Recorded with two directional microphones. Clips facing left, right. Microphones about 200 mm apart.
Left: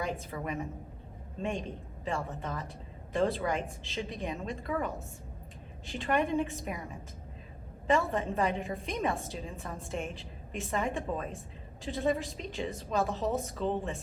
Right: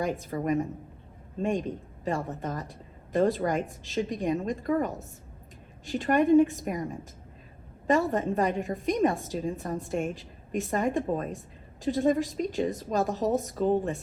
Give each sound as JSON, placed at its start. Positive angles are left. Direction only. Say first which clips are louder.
{"t": 0.0, "sound": "a woman's voice", "louder": "right 6 dB", "side_deg": -45}
{"t": 7.9, "sound": "a woman's voice", "louder": "right 4 dB", "side_deg": -45}